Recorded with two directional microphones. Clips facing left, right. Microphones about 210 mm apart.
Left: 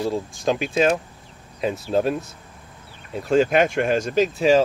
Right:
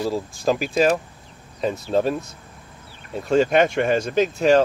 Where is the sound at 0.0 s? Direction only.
5° right (ahead or behind).